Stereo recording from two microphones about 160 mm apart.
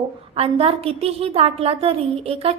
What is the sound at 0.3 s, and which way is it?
A woman's voice, 35° right (ahead or behind).